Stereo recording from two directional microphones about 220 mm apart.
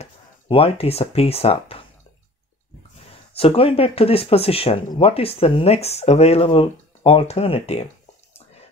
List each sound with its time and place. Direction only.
0.0 s speech: 25° left (ahead or behind)
3.3 s speech: 25° left (ahead or behind)